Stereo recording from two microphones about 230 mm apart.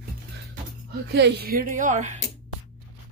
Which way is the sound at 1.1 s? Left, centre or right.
Right.